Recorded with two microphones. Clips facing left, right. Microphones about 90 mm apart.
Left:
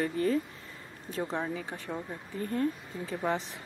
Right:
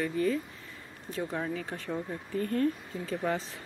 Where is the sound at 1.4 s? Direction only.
20° left (ahead or behind).